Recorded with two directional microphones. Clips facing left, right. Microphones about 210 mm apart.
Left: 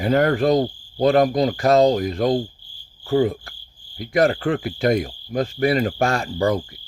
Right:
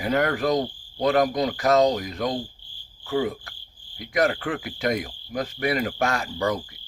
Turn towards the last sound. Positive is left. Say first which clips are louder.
# left 5 dB
turn(degrees=30)  # may be behind; listen again after turning